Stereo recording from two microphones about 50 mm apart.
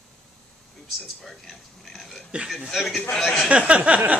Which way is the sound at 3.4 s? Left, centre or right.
Right.